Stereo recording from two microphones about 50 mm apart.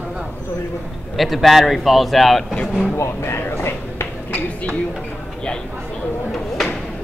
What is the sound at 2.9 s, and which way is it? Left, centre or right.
Speech, left.